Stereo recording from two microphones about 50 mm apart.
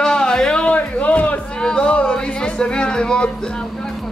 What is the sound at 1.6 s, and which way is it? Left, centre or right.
Music, centre.